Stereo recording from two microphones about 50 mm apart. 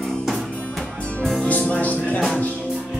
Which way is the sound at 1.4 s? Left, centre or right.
Left.